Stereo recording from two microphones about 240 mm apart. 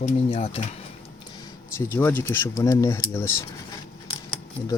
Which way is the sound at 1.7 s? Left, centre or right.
Centre.